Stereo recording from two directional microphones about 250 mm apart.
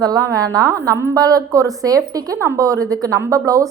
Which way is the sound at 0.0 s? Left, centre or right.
Centre.